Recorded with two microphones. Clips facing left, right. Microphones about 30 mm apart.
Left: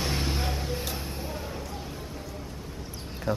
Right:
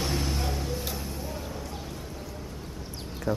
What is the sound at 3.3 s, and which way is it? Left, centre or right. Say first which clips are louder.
Speech: even; left.